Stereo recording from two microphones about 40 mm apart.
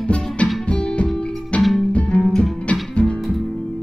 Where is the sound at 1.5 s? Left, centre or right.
Left.